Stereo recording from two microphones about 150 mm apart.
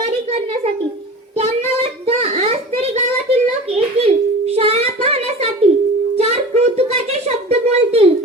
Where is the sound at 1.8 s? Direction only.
45° right (ahead or behind).